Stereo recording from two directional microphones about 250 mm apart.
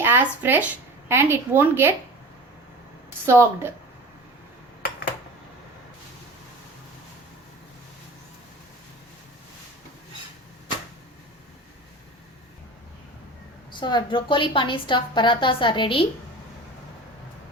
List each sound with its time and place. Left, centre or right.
0.0 s a woman's voice: centre
3.2 s a woman's voice: centre
13.7 s a woman's voice: centre